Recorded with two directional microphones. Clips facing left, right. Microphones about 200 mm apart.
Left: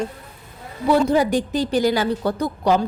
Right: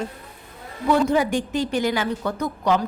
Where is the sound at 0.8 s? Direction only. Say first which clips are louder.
Left 2 dB; 35° left (ahead or behind).